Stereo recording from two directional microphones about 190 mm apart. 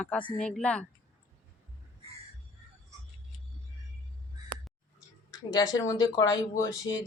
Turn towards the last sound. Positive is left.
turn(degrees=20)  # may be behind; listen again after turning